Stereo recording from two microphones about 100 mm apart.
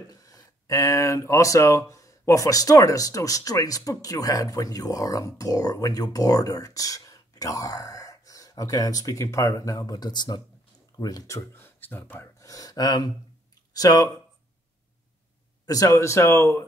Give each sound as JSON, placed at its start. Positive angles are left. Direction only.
{"t": 0.1, "sound": "speech", "side_deg": 35}
{"t": 12.4, "sound": "speech", "side_deg": 35}
{"t": 15.6, "sound": "speech", "side_deg": 35}